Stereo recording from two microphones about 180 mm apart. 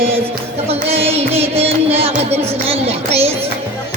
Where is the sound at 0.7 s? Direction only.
35° right (ahead or behind).